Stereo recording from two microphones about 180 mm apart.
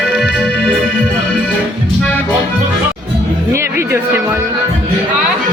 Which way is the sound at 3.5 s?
15° right (ahead or behind).